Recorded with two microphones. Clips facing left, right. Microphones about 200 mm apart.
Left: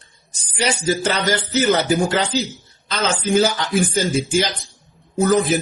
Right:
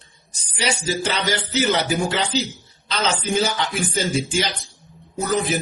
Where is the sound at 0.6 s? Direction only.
50° left (ahead or behind).